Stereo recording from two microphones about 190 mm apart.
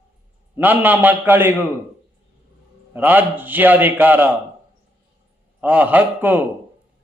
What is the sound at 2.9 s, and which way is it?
A man's voice, 10° right (ahead or behind).